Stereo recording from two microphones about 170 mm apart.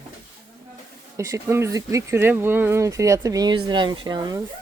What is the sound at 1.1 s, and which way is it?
Speech, 20° right (ahead or behind).